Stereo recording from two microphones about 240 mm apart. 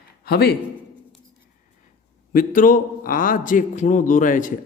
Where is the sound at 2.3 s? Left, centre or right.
Left.